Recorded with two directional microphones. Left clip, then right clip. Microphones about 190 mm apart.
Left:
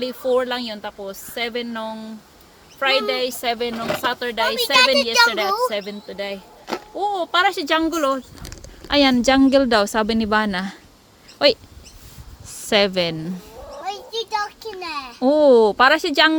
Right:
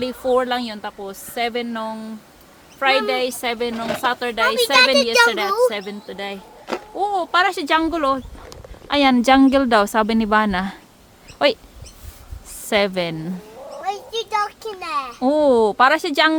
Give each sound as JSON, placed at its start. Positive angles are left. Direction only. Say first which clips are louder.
{"t": 0.0, "sound": "a woman's voice", "louder": "right 1 dB", "side_deg": -5}
{"t": 9.1, "sound": "a woman's voice", "louder": "right 1 dB", "side_deg": -10}
{"t": 12.6, "sound": "speech", "louder": "left 1 dB", "side_deg": 5}
{"t": 14.8, "sound": "a child's voice", "louder": "right 5 dB", "side_deg": -10}
{"t": 15.2, "sound": "speech", "louder": "left 3 dB", "side_deg": 5}